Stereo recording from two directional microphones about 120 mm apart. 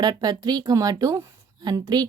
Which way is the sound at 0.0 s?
35° right (ahead or behind).